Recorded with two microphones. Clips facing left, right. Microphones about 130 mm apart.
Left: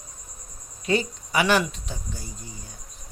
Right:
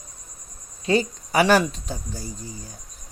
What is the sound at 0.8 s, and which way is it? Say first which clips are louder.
Speech: right 3 dB; 35° right (ahead or behind).